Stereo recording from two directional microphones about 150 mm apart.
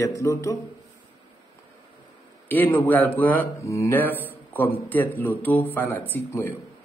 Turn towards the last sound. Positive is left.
turn(degrees=10)  # may be behind; listen again after turning